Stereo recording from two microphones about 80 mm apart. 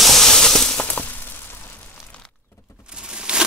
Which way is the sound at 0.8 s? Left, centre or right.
Left.